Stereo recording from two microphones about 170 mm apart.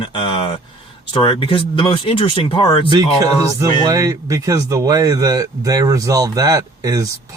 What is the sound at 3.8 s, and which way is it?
Speech, 20° right (ahead or behind).